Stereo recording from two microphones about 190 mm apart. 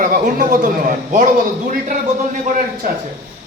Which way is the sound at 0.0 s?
45° right (ahead or behind).